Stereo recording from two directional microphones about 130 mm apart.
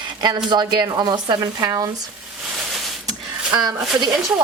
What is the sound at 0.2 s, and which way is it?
Speech, 30° right (ahead or behind).